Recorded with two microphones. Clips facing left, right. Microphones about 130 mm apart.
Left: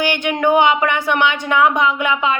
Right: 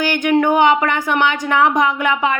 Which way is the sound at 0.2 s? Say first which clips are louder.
Right 2 dB; 45° right (ahead or behind).